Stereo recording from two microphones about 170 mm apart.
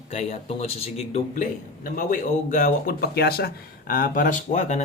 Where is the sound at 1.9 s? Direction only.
50° left (ahead or behind).